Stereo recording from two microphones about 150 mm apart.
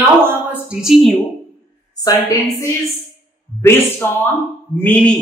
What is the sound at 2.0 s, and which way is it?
A woman's voice, 25° left (ahead or behind).